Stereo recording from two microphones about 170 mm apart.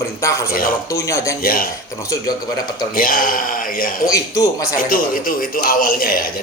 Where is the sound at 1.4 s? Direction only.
60° left (ahead or behind).